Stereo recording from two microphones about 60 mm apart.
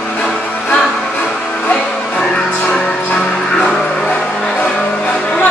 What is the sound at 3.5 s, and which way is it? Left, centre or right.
Vehicle, centre.